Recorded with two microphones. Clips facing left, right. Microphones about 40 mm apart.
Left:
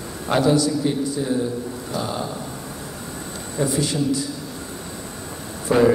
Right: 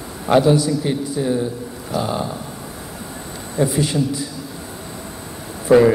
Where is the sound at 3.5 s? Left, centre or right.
Right.